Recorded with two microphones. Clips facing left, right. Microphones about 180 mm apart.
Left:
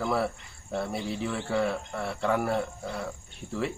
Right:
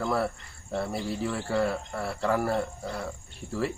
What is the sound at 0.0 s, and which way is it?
Speech, centre (ahead or behind).